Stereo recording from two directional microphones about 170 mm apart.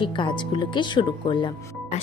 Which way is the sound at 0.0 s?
30° left (ahead or behind).